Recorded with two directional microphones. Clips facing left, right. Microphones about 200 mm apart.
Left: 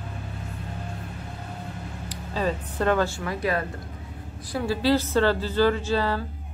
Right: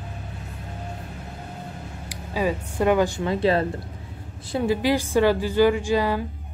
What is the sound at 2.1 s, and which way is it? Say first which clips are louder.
A woman's voice: right 2 dB; 10° right (ahead or behind).